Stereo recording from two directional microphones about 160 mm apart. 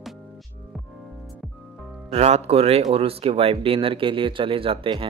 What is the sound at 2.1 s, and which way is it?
Speech, 40° right (ahead or behind).